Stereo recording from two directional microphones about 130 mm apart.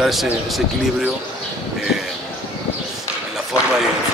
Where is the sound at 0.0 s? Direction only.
Centre (ahead or behind).